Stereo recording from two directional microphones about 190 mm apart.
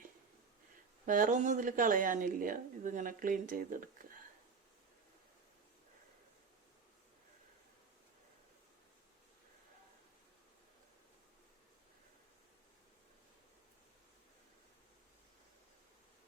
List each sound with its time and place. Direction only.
1.0 s speech: 45° right (ahead or behind)